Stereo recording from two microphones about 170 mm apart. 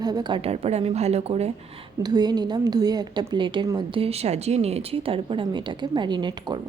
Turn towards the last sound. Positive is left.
turn(degrees=-25)  # may be behind; listen again after turning